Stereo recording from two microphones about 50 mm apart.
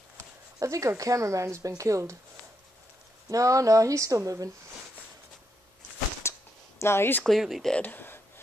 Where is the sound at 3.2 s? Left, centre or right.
Right.